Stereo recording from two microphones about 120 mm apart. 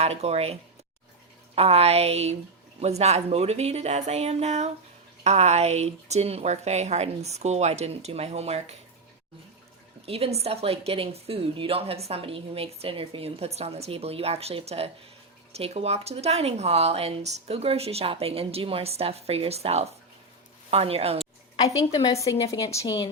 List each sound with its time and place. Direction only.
0.0 s speech: 60° right (ahead or behind)
1.5 s speech: 60° right (ahead or behind)
10.1 s speech: 55° right (ahead or behind)
22.2 s a woman's voice: 30° left (ahead or behind)